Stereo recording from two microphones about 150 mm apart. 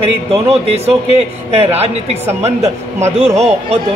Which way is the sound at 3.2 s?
45° right (ahead or behind).